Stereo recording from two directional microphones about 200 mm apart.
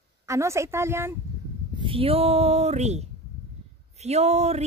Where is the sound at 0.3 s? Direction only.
15° right (ahead or behind).